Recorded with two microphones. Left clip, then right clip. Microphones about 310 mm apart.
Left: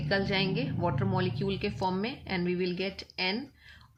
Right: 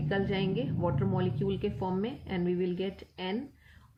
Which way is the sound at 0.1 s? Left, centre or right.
Centre.